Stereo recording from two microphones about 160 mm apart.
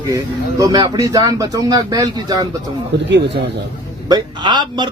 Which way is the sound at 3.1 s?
90° right.